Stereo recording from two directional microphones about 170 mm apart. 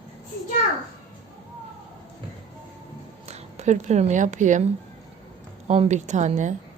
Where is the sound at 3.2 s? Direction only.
40° right (ahead or behind).